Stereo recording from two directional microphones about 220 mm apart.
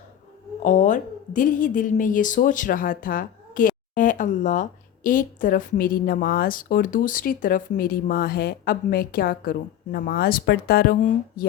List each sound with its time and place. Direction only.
0.6 s a woman's voice: 35° left (ahead or behind)